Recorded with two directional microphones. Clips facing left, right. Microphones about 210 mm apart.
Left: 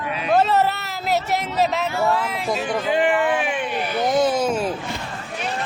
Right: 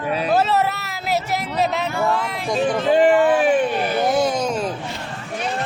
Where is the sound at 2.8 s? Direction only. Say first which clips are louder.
Right 5 dB; 35° right (ahead or behind).